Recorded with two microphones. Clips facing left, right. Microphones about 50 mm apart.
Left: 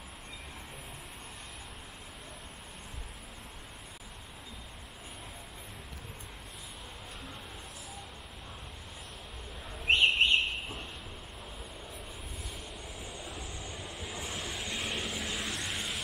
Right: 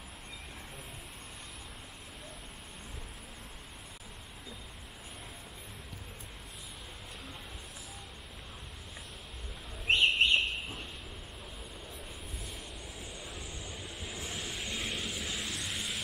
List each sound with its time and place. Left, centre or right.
9.8 s bird: left
13.0 s vehicle: centre